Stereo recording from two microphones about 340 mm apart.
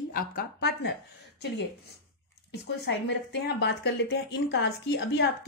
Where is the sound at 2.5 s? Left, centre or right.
Left.